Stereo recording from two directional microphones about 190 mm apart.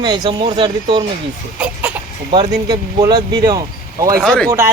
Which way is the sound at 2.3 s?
25° right (ahead or behind).